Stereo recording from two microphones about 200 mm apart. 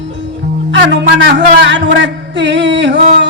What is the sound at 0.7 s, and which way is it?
Music, 60° right (ahead or behind).